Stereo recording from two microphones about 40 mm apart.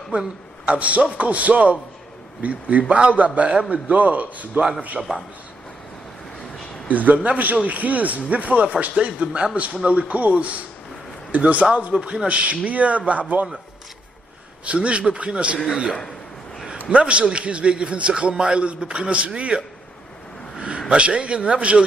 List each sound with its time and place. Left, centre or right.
0.1 s a man's voice: right
3.4 s a man's voice: centre
3.7 s a man's voice: right
4.6 s a man's voice: right
6.9 s a man's voice: right
11.9 s a man's voice: right
14.6 s a man's voice: right
20.9 s a man's voice: right